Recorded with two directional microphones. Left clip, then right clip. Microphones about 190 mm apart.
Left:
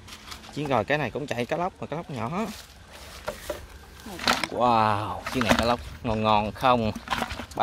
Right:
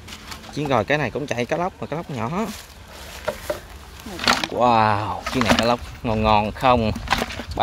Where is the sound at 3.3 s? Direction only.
25° left (ahead or behind).